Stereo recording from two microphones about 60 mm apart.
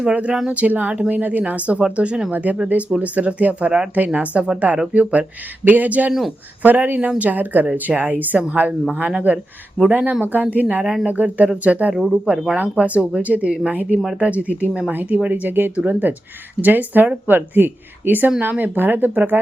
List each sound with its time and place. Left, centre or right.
0.0 s speech: centre
6.1 s speech: centre
6.6 s speech: right